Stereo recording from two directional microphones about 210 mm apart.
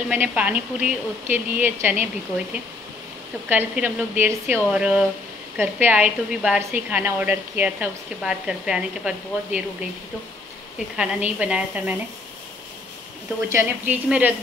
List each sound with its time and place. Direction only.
0.1 s a woman's voice: 5° right (ahead or behind)
11.0 s a woman's voice: 5° right (ahead or behind)
13.5 s a woman's voice: 10° right (ahead or behind)